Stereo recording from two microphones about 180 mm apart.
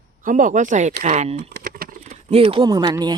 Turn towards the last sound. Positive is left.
turn(degrees=-25)  # may be behind; listen again after turning